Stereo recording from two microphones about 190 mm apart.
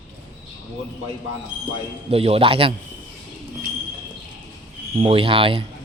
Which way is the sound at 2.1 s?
30° right (ahead or behind).